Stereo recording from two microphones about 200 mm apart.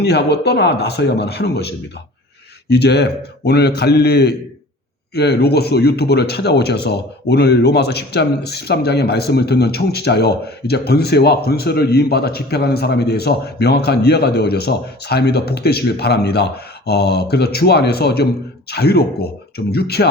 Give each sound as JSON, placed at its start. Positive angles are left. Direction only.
{"t": 0.0, "sound": "speech", "side_deg": 55}